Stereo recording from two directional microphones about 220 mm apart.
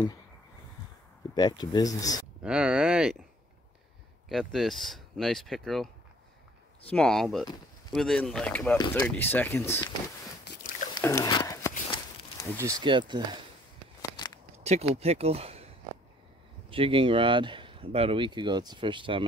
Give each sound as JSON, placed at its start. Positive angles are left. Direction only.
{"t": 1.3, "sound": "speech", "side_deg": 20}
{"t": 2.4, "sound": "speech", "side_deg": -5}
{"t": 4.3, "sound": "speech", "side_deg": 0}
{"t": 6.9, "sound": "speech", "side_deg": 5}
{"t": 10.4, "sound": "a sound", "side_deg": 50}
{"t": 11.0, "sound": "a sound", "side_deg": 15}
{"t": 12.5, "sound": "speech", "side_deg": -15}
{"t": 14.1, "sound": "a sound", "side_deg": 20}
{"t": 14.5, "sound": "speech", "side_deg": -30}
{"t": 16.7, "sound": "speech", "side_deg": -25}